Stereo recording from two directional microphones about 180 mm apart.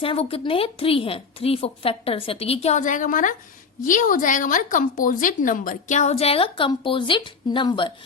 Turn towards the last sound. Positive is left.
turn(degrees=25)  # may be behind; listen again after turning